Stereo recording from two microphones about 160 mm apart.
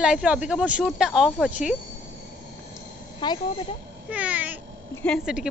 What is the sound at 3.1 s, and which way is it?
Speech, 30° left (ahead or behind).